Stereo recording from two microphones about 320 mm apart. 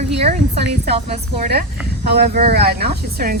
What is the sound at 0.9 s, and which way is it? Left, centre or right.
A woman's voice, right.